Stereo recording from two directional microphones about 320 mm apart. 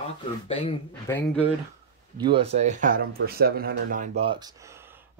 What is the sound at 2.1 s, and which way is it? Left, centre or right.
Speech, centre.